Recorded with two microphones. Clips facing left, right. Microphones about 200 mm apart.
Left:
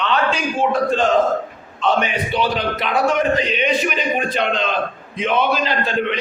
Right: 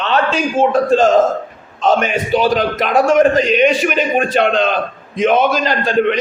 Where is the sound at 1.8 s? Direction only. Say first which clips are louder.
Right 4 dB; 45° right (ahead or behind).